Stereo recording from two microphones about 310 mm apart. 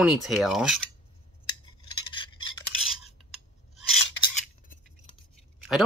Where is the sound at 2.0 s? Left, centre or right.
Centre.